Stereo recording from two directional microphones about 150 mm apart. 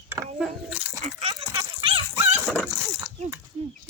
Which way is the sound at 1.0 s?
45° right (ahead or behind).